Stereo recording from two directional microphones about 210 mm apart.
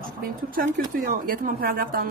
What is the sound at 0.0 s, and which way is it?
A woman's voice, 45° right (ahead or behind).